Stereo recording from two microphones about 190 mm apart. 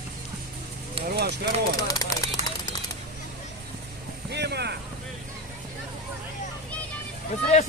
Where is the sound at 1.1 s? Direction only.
60° right (ahead or behind).